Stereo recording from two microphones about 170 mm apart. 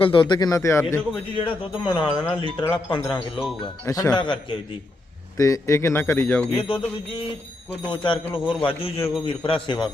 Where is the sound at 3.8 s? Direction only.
20° left (ahead or behind).